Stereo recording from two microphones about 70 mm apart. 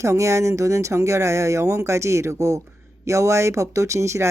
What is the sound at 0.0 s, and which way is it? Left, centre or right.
Speech, right.